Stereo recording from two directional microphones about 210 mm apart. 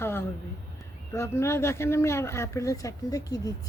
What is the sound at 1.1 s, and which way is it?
Speech, 15° left (ahead or behind).